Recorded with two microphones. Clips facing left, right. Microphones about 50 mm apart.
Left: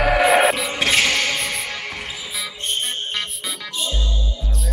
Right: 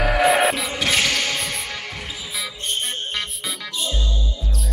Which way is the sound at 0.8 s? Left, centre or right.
Centre.